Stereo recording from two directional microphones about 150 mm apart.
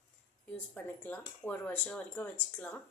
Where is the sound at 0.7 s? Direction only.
10° left (ahead or behind).